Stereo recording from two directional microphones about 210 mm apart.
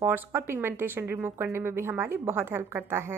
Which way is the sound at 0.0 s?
10° right (ahead or behind).